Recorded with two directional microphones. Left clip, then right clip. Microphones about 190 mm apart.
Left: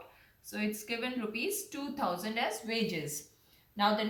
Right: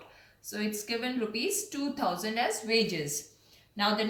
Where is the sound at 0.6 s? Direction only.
15° left (ahead or behind).